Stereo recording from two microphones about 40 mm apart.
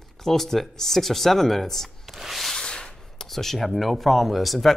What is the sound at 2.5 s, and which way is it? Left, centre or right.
Sanding, centre.